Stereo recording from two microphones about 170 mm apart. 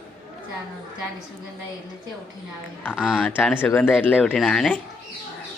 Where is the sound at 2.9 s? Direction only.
5° right (ahead or behind).